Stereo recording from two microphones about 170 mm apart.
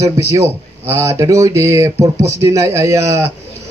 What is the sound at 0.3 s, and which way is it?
A man's voice, 15° right (ahead or behind).